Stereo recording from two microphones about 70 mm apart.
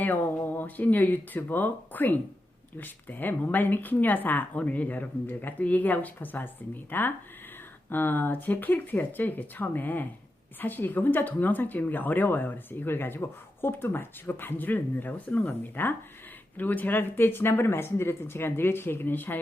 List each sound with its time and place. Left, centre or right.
0.0 s speech: left